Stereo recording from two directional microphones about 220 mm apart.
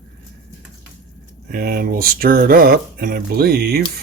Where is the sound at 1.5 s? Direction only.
45° right (ahead or behind).